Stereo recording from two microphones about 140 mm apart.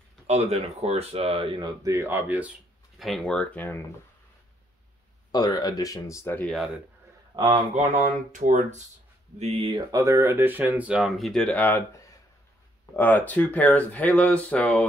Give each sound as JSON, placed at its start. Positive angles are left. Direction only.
{"t": 0.3, "sound": "speech", "side_deg": -45}
{"t": 3.0, "sound": "speech", "side_deg": 5}
{"t": 5.3, "sound": "speech", "side_deg": 30}
{"t": 7.3, "sound": "speech", "side_deg": -35}
{"t": 8.3, "sound": "speech", "side_deg": -60}
{"t": 9.4, "sound": "speech", "side_deg": -45}
{"t": 9.8, "sound": "speech", "side_deg": -25}
{"t": 12.9, "sound": "speech", "side_deg": 10}